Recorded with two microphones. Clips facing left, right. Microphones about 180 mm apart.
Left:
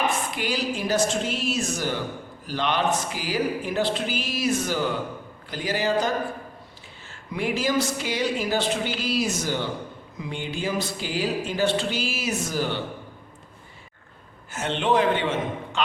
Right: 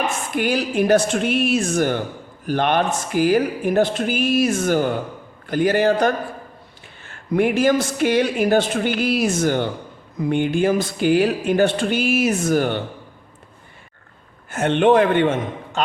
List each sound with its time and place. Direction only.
0.3 s a man's voice: 55° right (ahead or behind)
14.5 s a man's voice: 55° right (ahead or behind)